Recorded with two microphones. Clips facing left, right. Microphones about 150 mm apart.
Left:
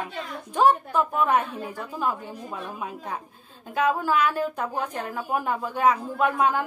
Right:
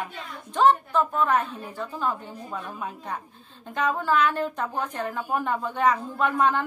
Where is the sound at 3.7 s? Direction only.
10° left (ahead or behind).